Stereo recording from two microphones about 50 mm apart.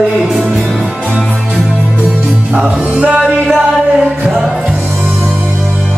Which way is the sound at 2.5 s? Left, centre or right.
Right.